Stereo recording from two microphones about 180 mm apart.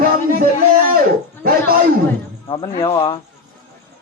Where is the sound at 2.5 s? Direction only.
25° left (ahead or behind).